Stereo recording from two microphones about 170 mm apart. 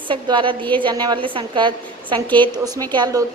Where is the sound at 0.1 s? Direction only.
30° right (ahead or behind).